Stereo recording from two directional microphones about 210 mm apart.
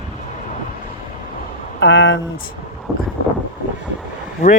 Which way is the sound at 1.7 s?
60° left (ahead or behind).